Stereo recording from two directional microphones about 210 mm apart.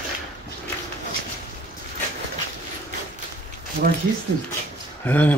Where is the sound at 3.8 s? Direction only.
45° right (ahead or behind).